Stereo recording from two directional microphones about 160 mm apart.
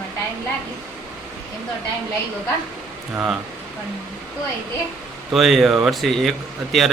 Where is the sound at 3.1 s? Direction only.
5° right (ahead or behind).